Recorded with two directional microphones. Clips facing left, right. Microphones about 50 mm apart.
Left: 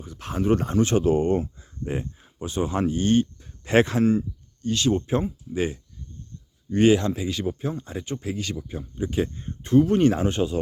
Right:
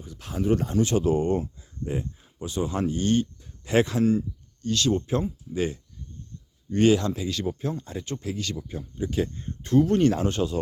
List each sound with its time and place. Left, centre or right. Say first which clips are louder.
0.0 s speech: left 2 dB; left
3.4 s speech: left 3 dB; left
4.6 s speech: left 1 dB; left